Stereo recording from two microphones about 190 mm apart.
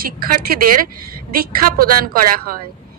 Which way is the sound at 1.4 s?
50° right (ahead or behind).